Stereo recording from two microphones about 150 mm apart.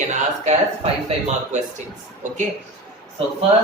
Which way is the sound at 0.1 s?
50° right (ahead or behind).